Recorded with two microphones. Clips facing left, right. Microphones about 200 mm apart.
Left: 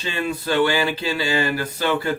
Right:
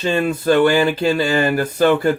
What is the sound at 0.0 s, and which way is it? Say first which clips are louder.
Speech: right 8 dB; 50° right (ahead or behind).